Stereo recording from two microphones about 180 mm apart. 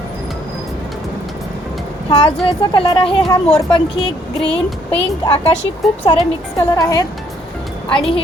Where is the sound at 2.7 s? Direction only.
30° left (ahead or behind).